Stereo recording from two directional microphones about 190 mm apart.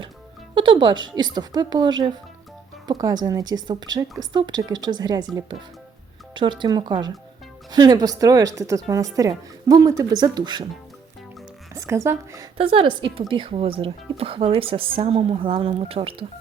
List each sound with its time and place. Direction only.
0.5 s a woman's voice: 25° right (ahead or behind)
11.7 s a woman's voice: 15° right (ahead or behind)
12.5 s a woman's voice: 30° right (ahead or behind)